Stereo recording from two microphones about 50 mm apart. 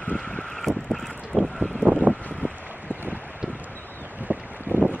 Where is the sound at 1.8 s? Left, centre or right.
Right.